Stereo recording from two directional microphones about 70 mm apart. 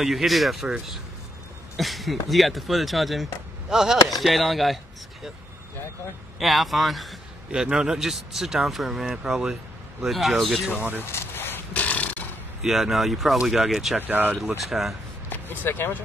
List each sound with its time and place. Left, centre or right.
0.0 s speech: centre
6.4 s a man's voice: centre
10.7 s speech: right
11.0 s a sound: left
11.7 s a sound: left
12.6 s speech: centre
13.9 s speech: right
14.6 s speech: centre
15.2 s speech: left